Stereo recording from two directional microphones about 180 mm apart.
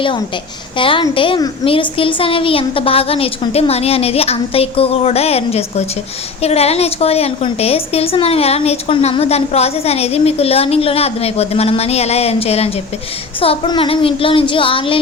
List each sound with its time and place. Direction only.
0.8 s a woman's voice: 30° left (ahead or behind)